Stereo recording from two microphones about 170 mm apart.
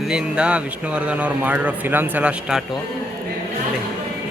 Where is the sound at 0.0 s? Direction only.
5° right (ahead or behind).